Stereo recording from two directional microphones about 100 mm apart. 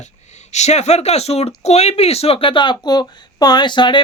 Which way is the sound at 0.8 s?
90° left.